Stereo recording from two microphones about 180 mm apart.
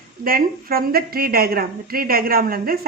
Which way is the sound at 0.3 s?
55° right (ahead or behind).